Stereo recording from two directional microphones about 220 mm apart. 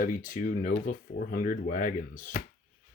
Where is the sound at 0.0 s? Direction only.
40° left (ahead or behind).